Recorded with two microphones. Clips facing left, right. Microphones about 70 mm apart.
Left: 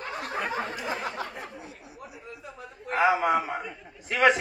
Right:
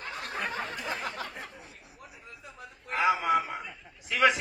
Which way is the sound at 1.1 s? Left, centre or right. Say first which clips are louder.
Left 3 dB; left.